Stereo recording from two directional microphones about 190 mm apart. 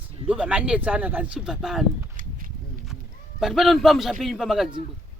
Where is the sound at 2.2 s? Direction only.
45° right (ahead or behind).